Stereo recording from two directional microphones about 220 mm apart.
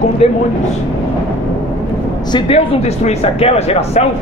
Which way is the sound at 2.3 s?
25° left (ahead or behind).